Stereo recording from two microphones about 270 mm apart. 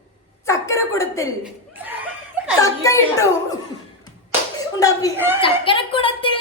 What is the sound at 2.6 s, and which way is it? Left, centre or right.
Speech, centre.